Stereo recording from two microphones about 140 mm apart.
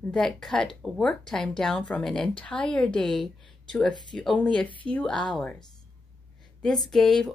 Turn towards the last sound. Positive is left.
turn(degrees=0)  # may be behind; listen again after turning